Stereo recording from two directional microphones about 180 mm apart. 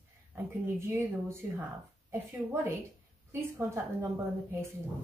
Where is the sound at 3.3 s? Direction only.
15° right (ahead or behind).